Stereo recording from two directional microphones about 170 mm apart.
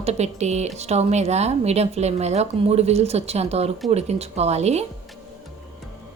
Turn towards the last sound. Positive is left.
turn(degrees=-40)  # may be behind; listen again after turning